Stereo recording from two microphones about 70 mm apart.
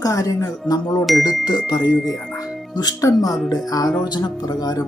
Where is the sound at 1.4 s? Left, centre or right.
Left.